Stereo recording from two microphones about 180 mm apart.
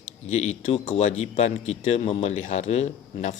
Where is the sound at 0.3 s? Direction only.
40° left (ahead or behind).